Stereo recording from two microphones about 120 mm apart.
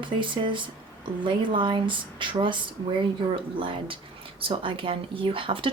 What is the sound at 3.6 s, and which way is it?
Speech, 45° right (ahead or behind).